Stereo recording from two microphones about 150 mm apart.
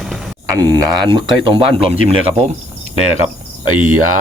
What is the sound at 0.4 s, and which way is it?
Speech, 25° right (ahead or behind).